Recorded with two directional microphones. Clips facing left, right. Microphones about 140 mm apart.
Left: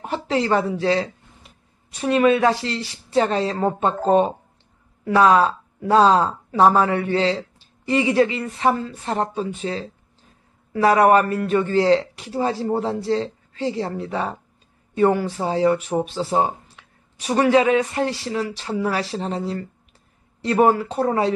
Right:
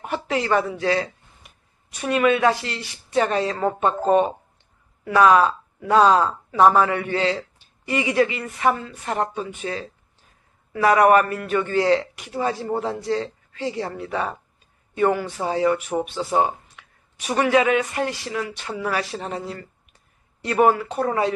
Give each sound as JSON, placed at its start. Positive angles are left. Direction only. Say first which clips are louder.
{"t": 0.0, "sound": "speech", "louder": "left 2 dB", "side_deg": 30}